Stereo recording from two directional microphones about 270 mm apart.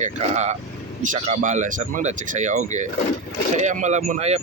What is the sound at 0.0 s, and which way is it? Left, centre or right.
Speech, right.